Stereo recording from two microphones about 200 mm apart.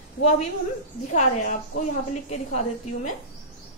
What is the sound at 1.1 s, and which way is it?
A woman's voice, 40° left (ahead or behind).